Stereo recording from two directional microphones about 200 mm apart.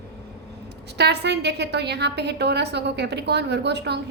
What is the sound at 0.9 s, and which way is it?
A woman's voice, 55° right (ahead or behind).